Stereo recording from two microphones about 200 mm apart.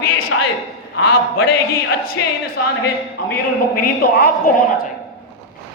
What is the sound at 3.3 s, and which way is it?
A man's voice, 50° left (ahead or behind).